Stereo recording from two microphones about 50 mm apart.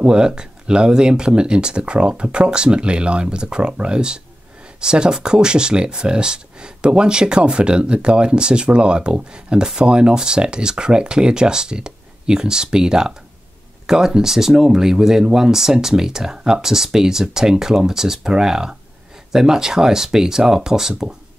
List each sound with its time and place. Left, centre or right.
0.0 s speech: centre